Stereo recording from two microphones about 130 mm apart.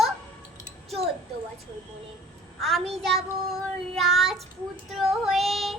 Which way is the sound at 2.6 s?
Centre (ahead or behind).